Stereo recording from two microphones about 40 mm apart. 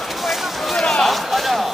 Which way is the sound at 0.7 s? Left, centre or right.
Centre.